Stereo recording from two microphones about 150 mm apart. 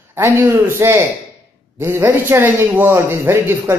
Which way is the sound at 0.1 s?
15° right (ahead or behind).